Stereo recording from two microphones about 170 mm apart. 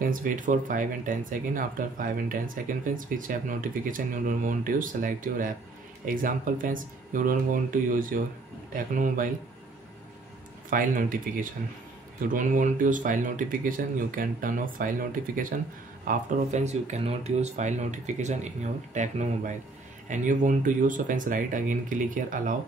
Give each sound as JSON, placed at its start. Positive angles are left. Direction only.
{"t": 0.0, "sound": "speech", "side_deg": -55}
{"t": 10.7, "sound": "speech", "side_deg": -55}